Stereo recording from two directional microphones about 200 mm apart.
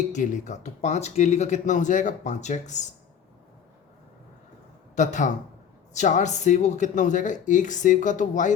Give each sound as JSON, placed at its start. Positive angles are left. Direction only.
{"t": 0.1, "sound": "speech", "side_deg": 35}
{"t": 4.9, "sound": "speech", "side_deg": 40}